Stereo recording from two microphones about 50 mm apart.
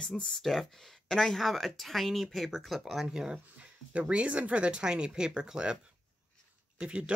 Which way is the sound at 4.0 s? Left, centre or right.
Right.